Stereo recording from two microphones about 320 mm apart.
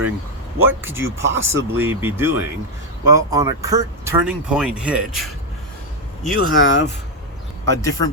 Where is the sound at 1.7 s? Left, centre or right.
Centre.